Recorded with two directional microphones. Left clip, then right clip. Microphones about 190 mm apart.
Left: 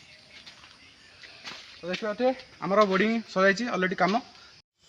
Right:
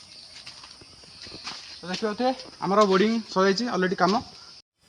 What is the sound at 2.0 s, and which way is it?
Speech, 25° left (ahead or behind).